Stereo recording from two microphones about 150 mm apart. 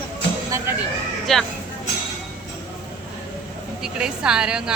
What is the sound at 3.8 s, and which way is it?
Speech, 5° right (ahead or behind).